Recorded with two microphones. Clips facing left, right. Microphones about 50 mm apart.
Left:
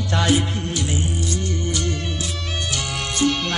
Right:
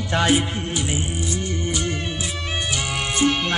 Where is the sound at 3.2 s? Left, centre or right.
Centre.